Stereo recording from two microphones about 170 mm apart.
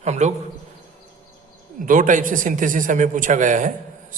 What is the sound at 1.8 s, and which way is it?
A man's voice, 50° right (ahead or behind).